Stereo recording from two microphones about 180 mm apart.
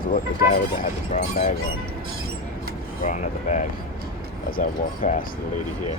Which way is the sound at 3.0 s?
40° left (ahead or behind).